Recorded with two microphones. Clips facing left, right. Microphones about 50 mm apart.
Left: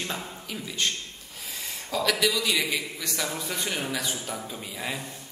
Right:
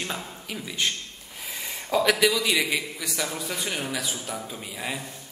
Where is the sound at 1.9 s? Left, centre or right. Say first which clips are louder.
Right 4 dB; centre.